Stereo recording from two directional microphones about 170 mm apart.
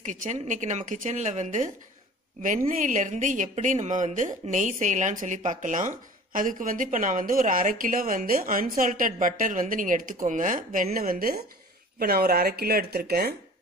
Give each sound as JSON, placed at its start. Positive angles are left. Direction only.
{"t": 0.0, "sound": "a woman's voice", "side_deg": -45}